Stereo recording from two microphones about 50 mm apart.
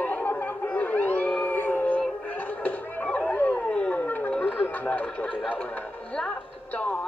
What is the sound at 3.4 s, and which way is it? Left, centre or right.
Dog, left.